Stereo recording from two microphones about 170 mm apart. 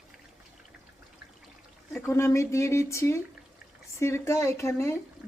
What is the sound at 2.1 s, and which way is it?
Speech, 15° left (ahead or behind).